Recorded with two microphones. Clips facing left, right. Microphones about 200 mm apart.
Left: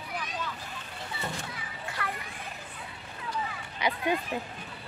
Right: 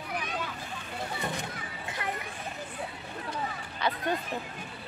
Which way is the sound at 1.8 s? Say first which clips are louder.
Even; 20° right (ahead or behind).